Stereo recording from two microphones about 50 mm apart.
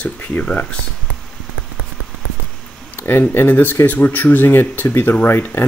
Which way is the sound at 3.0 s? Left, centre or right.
Left.